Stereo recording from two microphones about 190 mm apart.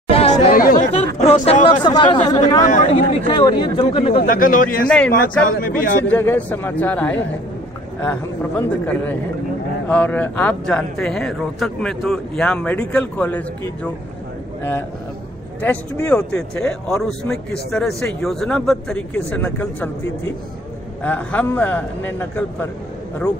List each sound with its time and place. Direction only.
0.1 s chatter: 30° left (ahead or behind)
0.5 s chatter: 50° left (ahead or behind)
1.1 s speech: 30° left (ahead or behind)
2.6 s speech: 40° left (ahead or behind)
3.3 s speech: 25° left (ahead or behind)
4.3 s speech: 45° left (ahead or behind)
4.8 s speech: 5° left (ahead or behind)
5.5 s speech: 45° left (ahead or behind)
6.0 s a man's voice: 10° left (ahead or behind)
21.0 s speech: 10° left (ahead or behind)